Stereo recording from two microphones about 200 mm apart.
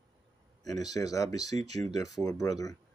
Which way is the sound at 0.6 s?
20° left (ahead or behind).